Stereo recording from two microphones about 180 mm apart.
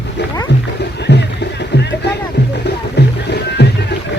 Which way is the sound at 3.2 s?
70° left (ahead or behind).